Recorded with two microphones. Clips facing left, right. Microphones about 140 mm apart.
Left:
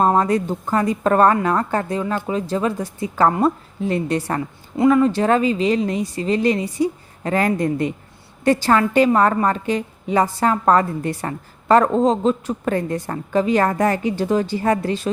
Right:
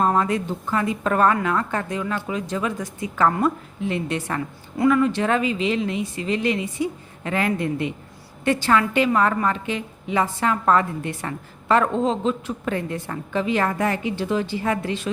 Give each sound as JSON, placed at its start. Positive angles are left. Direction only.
{"t": 0.0, "sound": "a woman's voice", "side_deg": 35}